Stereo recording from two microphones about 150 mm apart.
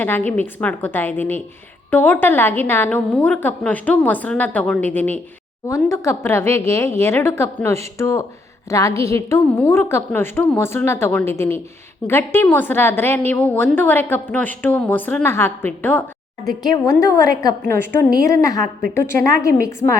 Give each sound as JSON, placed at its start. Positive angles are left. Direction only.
{"t": 0.0, "sound": "a woman's voice", "side_deg": 10}